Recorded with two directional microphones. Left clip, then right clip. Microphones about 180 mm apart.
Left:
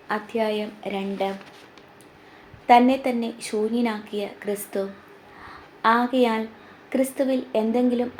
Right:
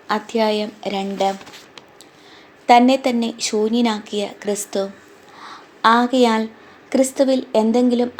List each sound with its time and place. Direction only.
0.1 s a woman's voice: 35° right (ahead or behind)
2.6 s a woman's voice: 35° right (ahead or behind)